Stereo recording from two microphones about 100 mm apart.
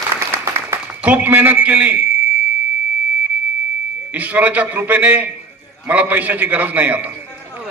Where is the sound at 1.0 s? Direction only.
15° right (ahead or behind).